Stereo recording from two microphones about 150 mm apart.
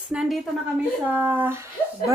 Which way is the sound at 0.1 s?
5° right (ahead or behind).